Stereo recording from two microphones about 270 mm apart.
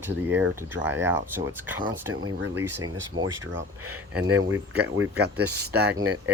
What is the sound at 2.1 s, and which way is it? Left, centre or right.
Speech, right.